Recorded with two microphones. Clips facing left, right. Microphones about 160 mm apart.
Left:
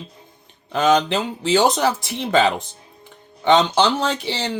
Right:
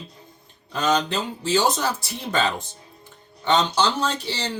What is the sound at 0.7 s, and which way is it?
Speech, 60° left (ahead or behind).